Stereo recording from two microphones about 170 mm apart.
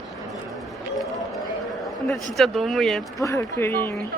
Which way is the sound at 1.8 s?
Centre (ahead or behind).